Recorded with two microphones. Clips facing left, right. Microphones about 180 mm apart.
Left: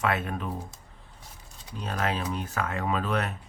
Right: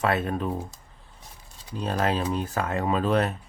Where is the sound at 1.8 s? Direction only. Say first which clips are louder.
Right 5 dB; 35° right (ahead or behind).